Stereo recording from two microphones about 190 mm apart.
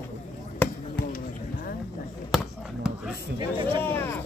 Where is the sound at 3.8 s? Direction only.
10° left (ahead or behind).